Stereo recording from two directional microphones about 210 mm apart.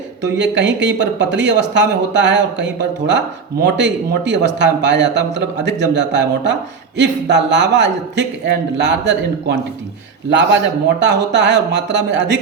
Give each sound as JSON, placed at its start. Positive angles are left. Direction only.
{"t": 0.2, "sound": "speech", "side_deg": -55}
{"t": 11.0, "sound": "speech", "side_deg": -55}